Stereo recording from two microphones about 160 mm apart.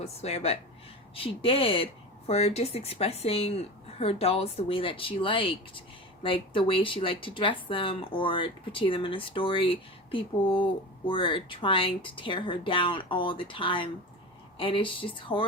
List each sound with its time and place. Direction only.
0.0 s speech: 40° left (ahead or behind)